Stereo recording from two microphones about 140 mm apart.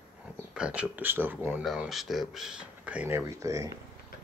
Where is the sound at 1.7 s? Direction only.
Centre (ahead or behind); by 3.7 s 25° right (ahead or behind).